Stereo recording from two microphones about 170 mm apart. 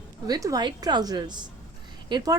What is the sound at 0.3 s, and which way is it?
Speech, 20° right (ahead or behind).